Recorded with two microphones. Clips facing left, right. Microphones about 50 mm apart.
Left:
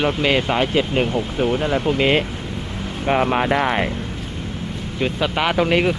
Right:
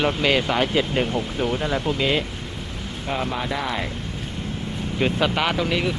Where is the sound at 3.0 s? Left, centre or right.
Left.